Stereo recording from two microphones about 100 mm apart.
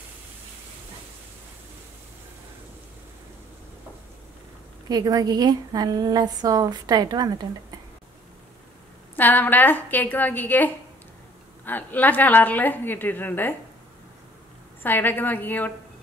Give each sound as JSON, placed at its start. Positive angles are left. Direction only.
{"t": 4.8, "sound": "a woman's voice", "side_deg": -40}
{"t": 9.1, "sound": "a woman's voice", "side_deg": 20}
{"t": 14.8, "sound": "a woman's voice", "side_deg": 20}